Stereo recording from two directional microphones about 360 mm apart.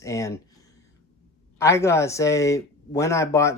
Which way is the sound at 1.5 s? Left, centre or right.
Centre.